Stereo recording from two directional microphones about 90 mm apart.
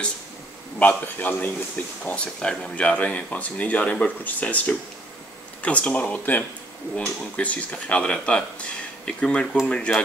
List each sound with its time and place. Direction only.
0.7 s a man's voice: 20° left (ahead or behind)